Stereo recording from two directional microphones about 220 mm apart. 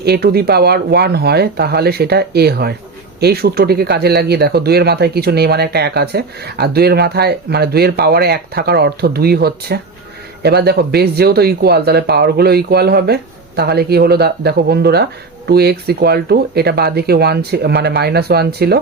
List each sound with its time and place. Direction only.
0.0 s speech: 45° right (ahead or behind)